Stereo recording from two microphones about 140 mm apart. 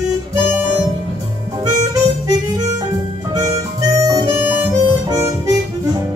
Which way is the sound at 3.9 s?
25° right (ahead or behind).